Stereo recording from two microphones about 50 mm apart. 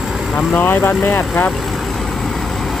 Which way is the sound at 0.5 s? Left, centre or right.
Left.